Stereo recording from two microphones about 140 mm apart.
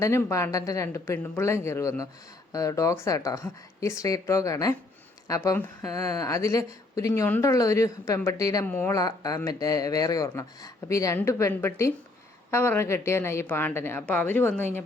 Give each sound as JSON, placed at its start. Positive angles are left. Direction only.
{"t": 0.0, "sound": "speech", "side_deg": 20}
{"t": 8.6, "sound": "a woman's voice", "side_deg": 15}
{"t": 9.0, "sound": "a woman's voice", "side_deg": 25}